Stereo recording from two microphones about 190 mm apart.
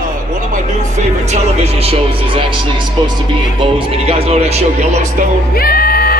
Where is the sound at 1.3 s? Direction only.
30° right (ahead or behind).